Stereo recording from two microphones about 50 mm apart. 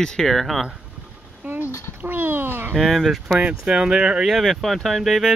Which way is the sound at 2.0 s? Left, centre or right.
Right.